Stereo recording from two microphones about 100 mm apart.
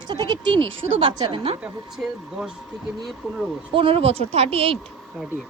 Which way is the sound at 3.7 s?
65° right (ahead or behind).